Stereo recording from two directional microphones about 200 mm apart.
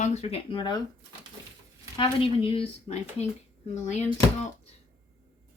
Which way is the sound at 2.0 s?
25° left (ahead or behind).